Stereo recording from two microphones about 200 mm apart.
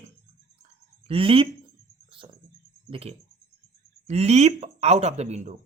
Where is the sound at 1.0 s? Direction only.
30° right (ahead or behind).